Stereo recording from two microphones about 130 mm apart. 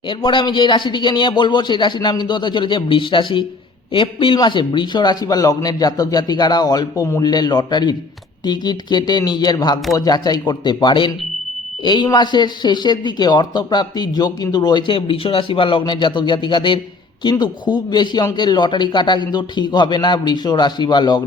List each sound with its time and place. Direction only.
0.1 s a man's voice: 35° left (ahead or behind)